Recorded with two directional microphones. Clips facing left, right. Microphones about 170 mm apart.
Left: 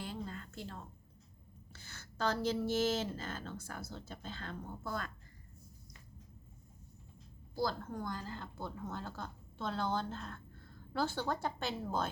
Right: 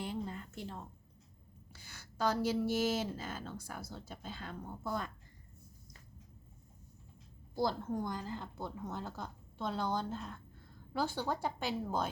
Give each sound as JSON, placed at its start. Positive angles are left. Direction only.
{"t": 0.0, "sound": "a sound", "side_deg": -15}
{"t": 1.7, "sound": "speech", "side_deg": -10}
{"t": 7.5, "sound": "speech", "side_deg": -20}